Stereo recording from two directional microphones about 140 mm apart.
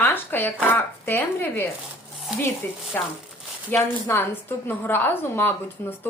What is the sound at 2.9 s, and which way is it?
A woman's voice, 15° left (ahead or behind).